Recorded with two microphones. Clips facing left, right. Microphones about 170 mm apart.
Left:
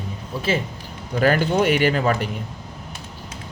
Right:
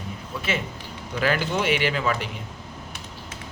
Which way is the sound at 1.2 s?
45° left (ahead or behind).